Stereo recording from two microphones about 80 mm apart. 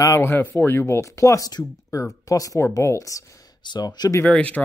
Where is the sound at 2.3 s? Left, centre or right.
Left.